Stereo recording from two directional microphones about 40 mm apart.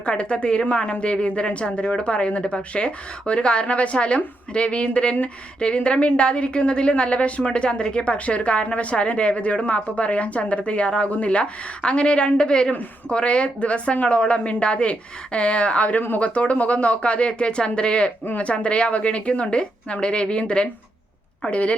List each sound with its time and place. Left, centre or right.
0.0 s a woman's voice: left